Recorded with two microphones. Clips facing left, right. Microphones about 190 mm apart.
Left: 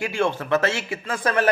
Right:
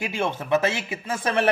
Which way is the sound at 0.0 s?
20° right (ahead or behind).